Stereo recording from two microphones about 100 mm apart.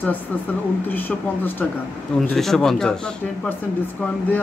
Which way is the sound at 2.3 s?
5° left (ahead or behind).